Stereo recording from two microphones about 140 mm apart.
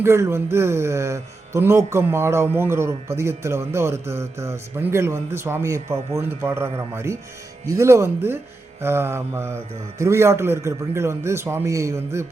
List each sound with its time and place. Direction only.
0.0 s speech: 20° right (ahead or behind)